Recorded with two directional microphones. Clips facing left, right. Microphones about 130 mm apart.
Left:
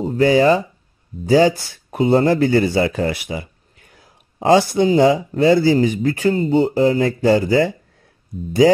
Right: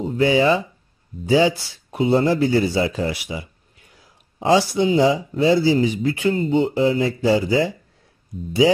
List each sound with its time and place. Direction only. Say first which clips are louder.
0.0 s speech: left 3 dB; 40° left (ahead or behind)